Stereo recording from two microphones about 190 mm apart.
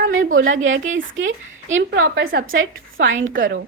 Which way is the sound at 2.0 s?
50° right (ahead or behind).